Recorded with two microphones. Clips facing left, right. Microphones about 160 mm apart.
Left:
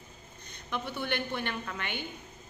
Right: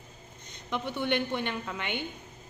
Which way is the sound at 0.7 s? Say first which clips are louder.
Right 4 dB; 20° right (ahead or behind).